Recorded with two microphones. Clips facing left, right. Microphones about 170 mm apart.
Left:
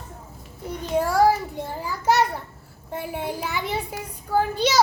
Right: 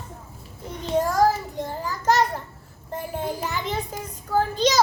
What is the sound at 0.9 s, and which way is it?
Child singing, 10° left (ahead or behind).